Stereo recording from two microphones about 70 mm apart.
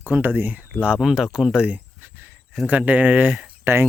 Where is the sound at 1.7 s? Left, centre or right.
Right.